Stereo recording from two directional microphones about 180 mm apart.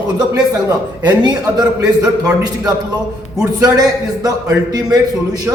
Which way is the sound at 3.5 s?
20° right (ahead or behind).